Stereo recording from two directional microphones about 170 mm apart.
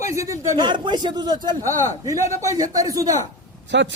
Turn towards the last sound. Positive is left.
turn(degrees=-90)